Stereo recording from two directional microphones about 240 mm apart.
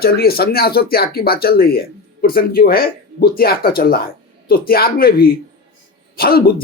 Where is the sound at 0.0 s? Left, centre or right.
Left.